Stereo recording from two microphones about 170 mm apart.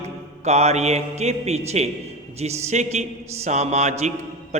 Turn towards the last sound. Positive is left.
turn(degrees=-40)  # may be behind; listen again after turning